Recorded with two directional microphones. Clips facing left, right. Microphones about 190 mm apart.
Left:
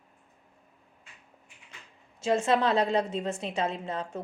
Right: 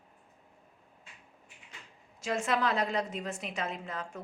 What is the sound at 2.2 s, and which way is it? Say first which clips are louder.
A woman's voice: left 6 dB; 25° left (ahead or behind).